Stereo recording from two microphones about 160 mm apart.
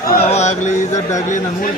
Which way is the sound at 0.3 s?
45° left (ahead or behind).